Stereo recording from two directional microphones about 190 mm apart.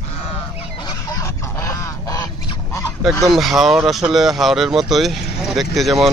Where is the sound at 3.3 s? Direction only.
Centre (ahead or behind).